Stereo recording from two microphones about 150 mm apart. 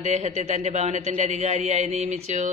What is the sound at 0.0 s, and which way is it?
Speech, 50° right (ahead or behind).